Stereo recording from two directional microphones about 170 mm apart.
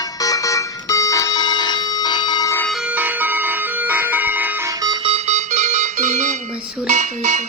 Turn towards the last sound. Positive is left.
turn(degrees=-45)  # may be behind; listen again after turning